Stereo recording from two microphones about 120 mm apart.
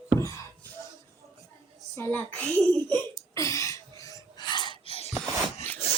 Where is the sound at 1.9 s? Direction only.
20° left (ahead or behind).